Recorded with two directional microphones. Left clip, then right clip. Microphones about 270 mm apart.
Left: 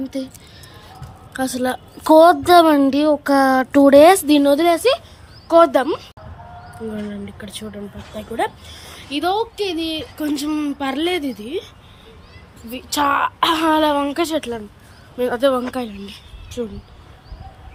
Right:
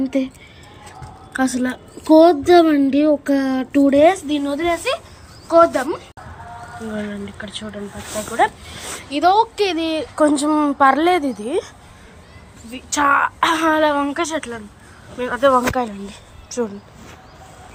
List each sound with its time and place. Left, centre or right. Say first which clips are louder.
0.0 s speech: right 6 dB; centre
1.3 s a child's voice: even; centre
12.7 s a child's voice: right 2 dB; centre